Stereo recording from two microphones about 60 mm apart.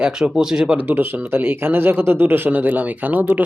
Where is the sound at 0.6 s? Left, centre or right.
Right.